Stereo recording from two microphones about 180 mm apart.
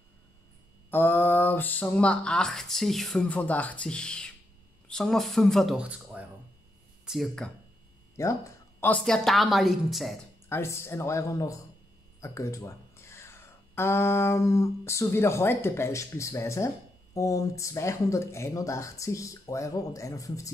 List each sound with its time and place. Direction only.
0.8 s a woman's voice: 10° left (ahead or behind)
8.2 s speech: 15° left (ahead or behind)
8.8 s a woman's voice: 5° left (ahead or behind)
10.5 s speech: 15° left (ahead or behind)